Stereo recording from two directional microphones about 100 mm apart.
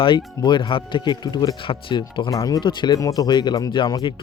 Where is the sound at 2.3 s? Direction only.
40° left (ahead or behind).